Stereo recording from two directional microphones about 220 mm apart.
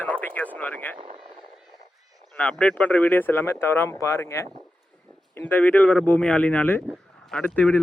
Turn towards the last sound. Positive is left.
turn(degrees=5)  # may be behind; listen again after turning